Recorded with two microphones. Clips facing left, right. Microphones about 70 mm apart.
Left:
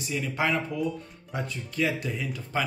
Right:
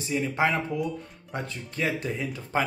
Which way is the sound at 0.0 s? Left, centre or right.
Right.